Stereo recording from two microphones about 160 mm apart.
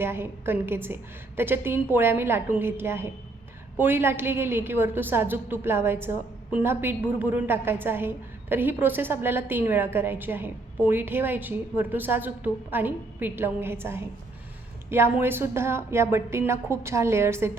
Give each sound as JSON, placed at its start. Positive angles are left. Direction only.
{"t": 0.0, "sound": "a woman's voice", "side_deg": -15}